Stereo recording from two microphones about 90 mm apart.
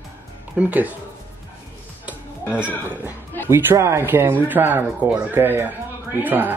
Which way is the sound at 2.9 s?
20° right (ahead or behind).